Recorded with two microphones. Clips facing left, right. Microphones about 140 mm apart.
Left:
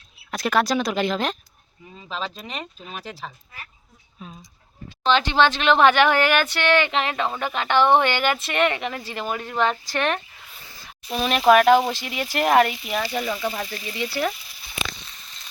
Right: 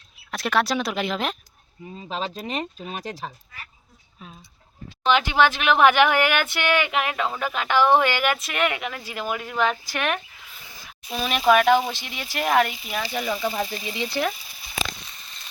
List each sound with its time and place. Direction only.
0.3 s speech: centre (ahead or behind)
2.0 s speech: 40° right (ahead or behind)
4.2 s speech: centre (ahead or behind)
5.0 s speech: 10° right (ahead or behind)
7.3 s speech: 20° left (ahead or behind)
7.6 s speech: 10° right (ahead or behind)
11.1 s speech: centre (ahead or behind)
13.7 s speech: 25° right (ahead or behind)